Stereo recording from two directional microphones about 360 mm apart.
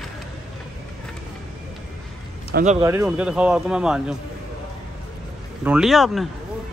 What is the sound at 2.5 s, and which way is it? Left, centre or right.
Speech, centre.